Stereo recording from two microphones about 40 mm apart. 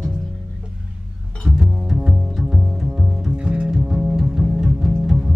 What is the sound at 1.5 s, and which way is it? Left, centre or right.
Double bass, centre.